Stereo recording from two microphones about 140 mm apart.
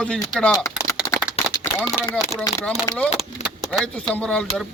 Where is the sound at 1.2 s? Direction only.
10° right (ahead or behind).